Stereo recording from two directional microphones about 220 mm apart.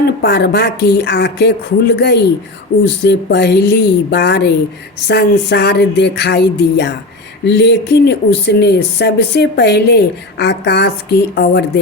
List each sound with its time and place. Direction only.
0.0 s speech: 50° left (ahead or behind)